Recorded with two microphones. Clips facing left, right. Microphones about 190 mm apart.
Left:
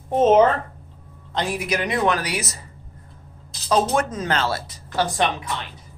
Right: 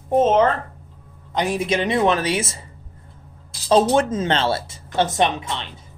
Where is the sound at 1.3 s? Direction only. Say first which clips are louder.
Right 3 dB; 20° right (ahead or behind).